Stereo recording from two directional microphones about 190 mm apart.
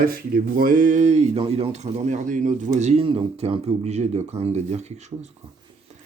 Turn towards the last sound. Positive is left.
turn(degrees=-35)  # may be behind; listen again after turning